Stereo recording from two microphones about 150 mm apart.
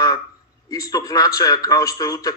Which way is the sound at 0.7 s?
25° left (ahead or behind).